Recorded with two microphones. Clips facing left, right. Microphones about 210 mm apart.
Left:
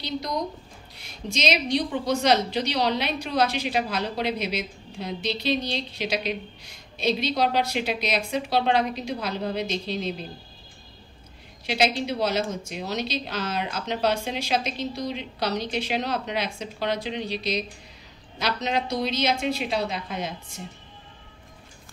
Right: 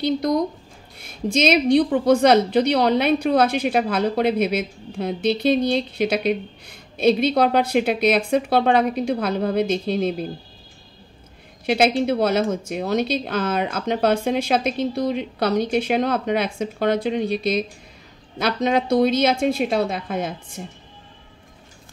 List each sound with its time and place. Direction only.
0.0 s a woman's voice: 50° right (ahead or behind)
11.6 s a woman's voice: 50° right (ahead or behind)